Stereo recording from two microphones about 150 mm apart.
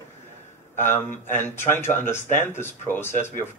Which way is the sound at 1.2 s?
15° left (ahead or behind).